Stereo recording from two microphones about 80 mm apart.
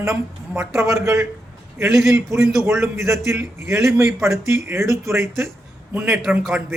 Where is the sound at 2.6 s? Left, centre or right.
Right.